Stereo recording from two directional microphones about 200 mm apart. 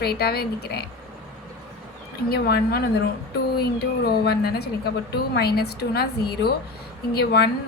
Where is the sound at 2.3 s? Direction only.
50° left (ahead or behind).